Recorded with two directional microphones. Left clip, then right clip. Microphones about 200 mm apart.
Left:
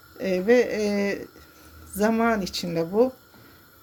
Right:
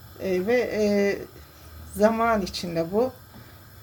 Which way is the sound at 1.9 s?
35° left (ahead or behind).